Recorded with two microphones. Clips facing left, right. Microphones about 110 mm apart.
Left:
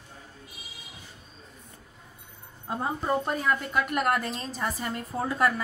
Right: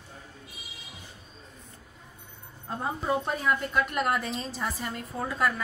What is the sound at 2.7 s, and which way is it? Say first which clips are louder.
A woman's voice: left 1 dB; centre (ahead or behind).